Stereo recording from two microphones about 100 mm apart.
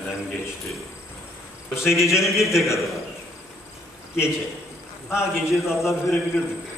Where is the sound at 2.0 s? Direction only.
30° left (ahead or behind).